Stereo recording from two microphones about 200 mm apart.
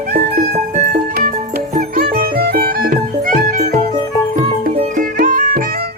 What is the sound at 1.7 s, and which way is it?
Music, 50° right (ahead or behind).